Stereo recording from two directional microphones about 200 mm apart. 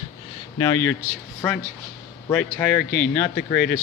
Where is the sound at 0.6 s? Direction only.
15° left (ahead or behind).